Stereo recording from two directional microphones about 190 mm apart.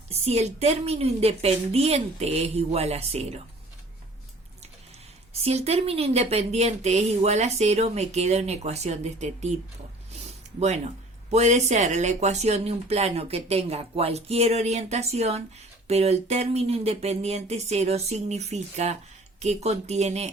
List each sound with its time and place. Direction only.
0.1 s a woman's voice: 35° right (ahead or behind)
5.3 s a woman's voice: 35° right (ahead or behind)
11.3 s a woman's voice: 35° right (ahead or behind)